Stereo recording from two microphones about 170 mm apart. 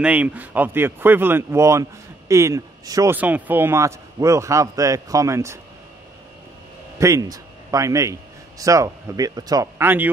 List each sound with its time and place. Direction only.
0.0 s speech: 10° right (ahead or behind)
7.0 s a man's voice: 20° right (ahead or behind)